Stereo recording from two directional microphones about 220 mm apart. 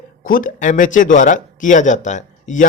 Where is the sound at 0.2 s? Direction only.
40° left (ahead or behind).